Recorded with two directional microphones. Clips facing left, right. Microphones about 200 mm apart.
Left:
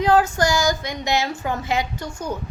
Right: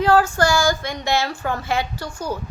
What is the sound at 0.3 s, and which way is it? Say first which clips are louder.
A woman's voice: right 1 dB; 20° left (ahead or behind).